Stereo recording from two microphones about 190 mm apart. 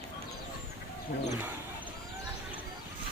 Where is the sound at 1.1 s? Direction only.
50° left (ahead or behind).